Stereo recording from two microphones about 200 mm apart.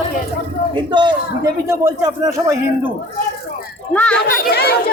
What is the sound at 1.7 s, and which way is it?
A man's voice, 15° right (ahead or behind).